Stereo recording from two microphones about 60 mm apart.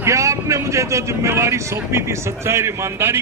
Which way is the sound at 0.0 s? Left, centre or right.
Right.